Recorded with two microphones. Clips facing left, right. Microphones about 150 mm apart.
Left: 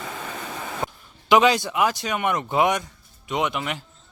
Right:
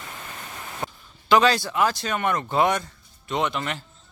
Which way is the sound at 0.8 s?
25° left (ahead or behind).